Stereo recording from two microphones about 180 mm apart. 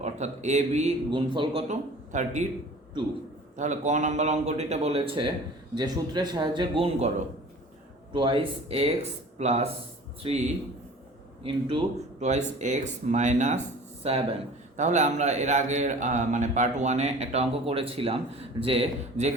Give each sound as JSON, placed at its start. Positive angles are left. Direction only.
{"t": 0.0, "sound": "a man's voice", "side_deg": -40}
{"t": 1.6, "sound": "a man's voice", "side_deg": -40}
{"t": 3.6, "sound": "a man's voice", "side_deg": -40}
{"t": 8.1, "sound": "a man's voice", "side_deg": -30}